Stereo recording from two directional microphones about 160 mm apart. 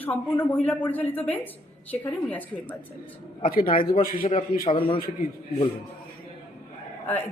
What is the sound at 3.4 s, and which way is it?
Speech, 60° left (ahead or behind).